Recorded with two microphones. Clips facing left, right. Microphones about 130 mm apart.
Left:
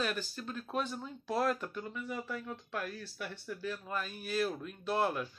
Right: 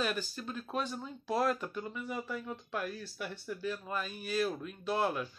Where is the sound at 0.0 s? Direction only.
5° right (ahead or behind).